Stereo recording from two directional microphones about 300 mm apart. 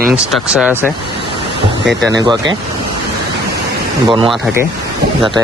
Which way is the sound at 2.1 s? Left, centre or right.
Centre.